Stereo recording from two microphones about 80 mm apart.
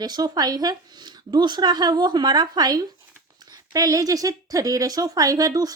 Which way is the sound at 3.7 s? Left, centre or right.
Right.